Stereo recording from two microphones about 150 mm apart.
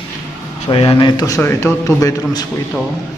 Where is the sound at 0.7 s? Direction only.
35° left (ahead or behind).